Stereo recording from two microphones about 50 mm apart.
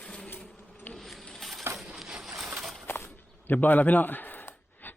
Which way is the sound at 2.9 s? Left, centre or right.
Left.